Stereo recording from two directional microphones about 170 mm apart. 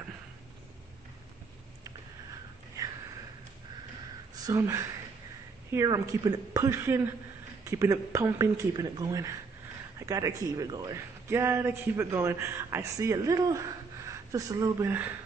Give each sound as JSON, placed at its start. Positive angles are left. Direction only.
{"t": 2.8, "sound": "sniff", "side_deg": -20}
{"t": 4.4, "sound": "a man's voice", "side_deg": -20}